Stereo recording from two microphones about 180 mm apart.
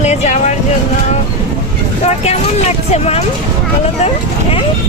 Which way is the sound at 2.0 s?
35° left (ahead or behind).